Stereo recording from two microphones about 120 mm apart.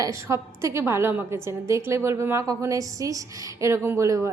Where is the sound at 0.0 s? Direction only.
25° right (ahead or behind).